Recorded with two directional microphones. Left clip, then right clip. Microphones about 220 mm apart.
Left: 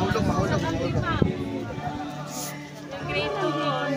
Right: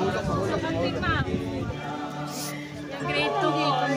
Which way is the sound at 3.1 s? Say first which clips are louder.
Right 2 dB; 30° right (ahead or behind).